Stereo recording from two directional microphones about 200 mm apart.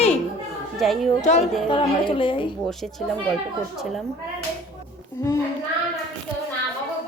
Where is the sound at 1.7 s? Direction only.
25° left (ahead or behind).